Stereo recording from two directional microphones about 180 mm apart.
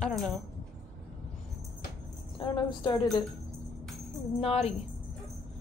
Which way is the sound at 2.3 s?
25° left (ahead or behind).